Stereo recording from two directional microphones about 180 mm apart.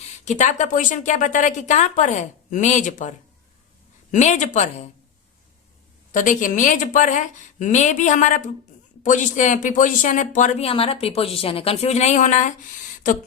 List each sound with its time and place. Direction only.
0.0 s speech: 40° left (ahead or behind)
4.1 s a woman's voice: 40° left (ahead or behind)
6.1 s speech: 45° left (ahead or behind)